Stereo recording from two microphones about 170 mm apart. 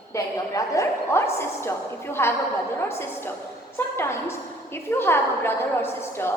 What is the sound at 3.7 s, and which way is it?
A woman's voice, 15° left (ahead or behind).